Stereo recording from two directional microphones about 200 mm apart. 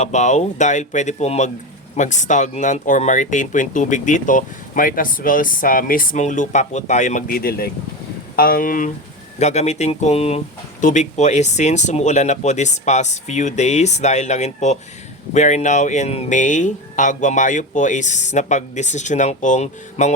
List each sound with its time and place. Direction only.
0.0 s speech: 35° left (ahead or behind)